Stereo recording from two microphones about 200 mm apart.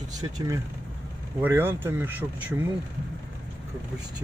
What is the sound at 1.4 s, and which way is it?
Speech, 10° right (ahead or behind).